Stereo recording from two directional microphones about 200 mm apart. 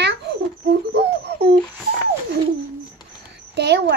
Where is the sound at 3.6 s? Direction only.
55° right (ahead or behind).